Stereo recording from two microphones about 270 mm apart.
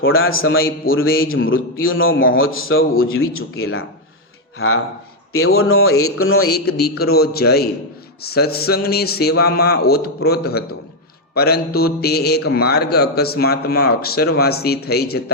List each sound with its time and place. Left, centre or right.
0.0 s a man's voice: left
0.9 s speech: left
1.3 s a man's voice: left
6.5 s speech: left